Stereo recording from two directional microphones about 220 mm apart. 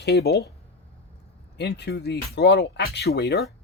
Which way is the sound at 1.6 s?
50° left (ahead or behind).